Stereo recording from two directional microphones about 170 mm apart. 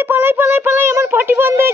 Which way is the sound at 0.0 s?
10° right (ahead or behind).